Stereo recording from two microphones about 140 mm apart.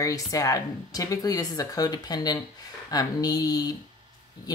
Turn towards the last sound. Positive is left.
turn(degrees=25)  # may be behind; listen again after turning